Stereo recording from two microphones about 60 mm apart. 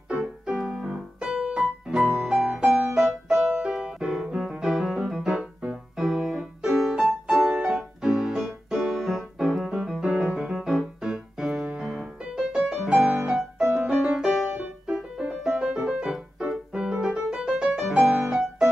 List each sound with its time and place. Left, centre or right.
0.7 s piano: centre
2.9 s music: centre
6.0 s piano: centre
7.3 s music: centre
11.8 s piano: centre
12.5 s music: centre
13.1 s piano: centre
13.7 s music: centre
18.3 s music: centre